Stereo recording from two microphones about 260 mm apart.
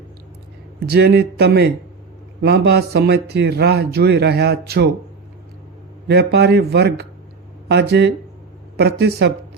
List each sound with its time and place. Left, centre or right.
0.8 s a man's voice: right
6.1 s a man's voice: right